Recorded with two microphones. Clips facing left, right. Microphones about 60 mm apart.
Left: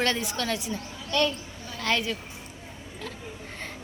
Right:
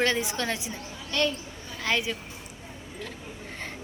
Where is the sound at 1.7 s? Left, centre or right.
Centre.